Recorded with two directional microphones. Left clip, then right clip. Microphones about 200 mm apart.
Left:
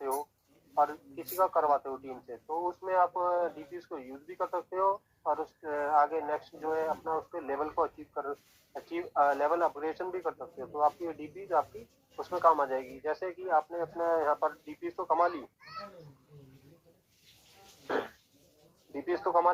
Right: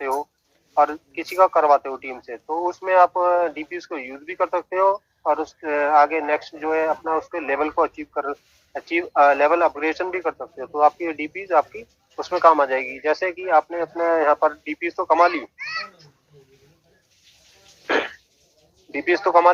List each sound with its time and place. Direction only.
0.7 s a man's voice: 40° right (ahead or behind)
6.6 s speech: 40° right (ahead or behind)
17.8 s a sound: 55° right (ahead or behind)
18.9 s speech: 50° right (ahead or behind)